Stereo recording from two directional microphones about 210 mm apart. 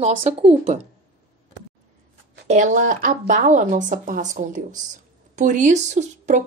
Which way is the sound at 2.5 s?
35° right (ahead or behind).